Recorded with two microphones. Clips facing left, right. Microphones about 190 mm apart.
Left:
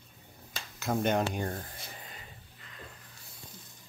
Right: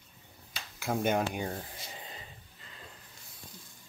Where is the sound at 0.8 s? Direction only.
5° right (ahead or behind).